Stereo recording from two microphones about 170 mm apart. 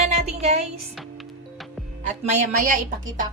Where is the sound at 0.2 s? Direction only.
40° right (ahead or behind).